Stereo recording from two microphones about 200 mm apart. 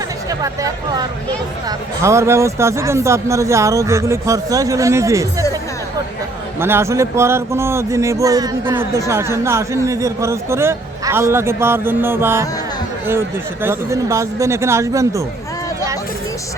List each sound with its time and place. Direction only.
0.3 s speech: 15° right (ahead or behind)
6.6 s speech: 10° right (ahead or behind)